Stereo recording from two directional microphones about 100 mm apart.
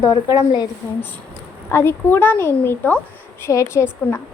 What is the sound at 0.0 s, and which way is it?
Speech, 40° left (ahead or behind).